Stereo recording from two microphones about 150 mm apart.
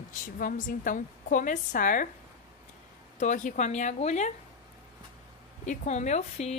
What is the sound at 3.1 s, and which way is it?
Speech, 55° left (ahead or behind).